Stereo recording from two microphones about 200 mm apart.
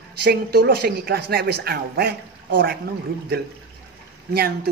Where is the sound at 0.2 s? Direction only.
55° right (ahead or behind).